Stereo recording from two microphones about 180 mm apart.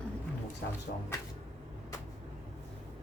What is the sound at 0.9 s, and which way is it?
Speech, 55° left (ahead or behind).